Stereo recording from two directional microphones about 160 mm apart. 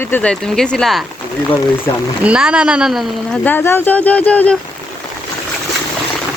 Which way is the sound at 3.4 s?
15° left (ahead or behind).